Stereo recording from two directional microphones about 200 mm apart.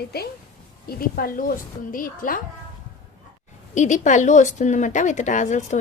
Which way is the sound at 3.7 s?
35° left (ahead or behind).